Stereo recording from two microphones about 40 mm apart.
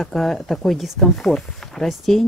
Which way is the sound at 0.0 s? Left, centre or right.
Centre.